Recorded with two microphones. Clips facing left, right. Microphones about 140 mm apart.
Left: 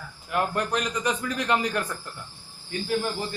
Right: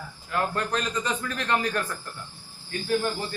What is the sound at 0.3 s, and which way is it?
A man's voice, 15° left (ahead or behind).